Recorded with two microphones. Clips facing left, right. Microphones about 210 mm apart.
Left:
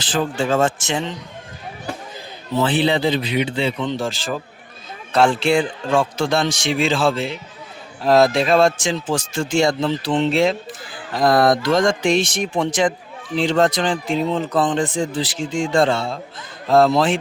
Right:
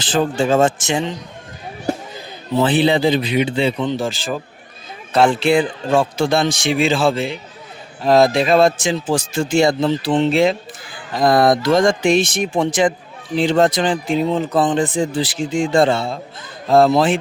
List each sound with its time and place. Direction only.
0.0 s a man's voice: 25° right (ahead or behind)
2.6 s a man's voice: 15° right (ahead or behind)
15.4 s speech: 55° right (ahead or behind)
15.7 s speech: 5° right (ahead or behind)